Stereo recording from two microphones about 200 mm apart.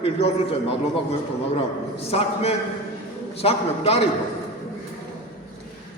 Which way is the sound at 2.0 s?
30° left (ahead or behind).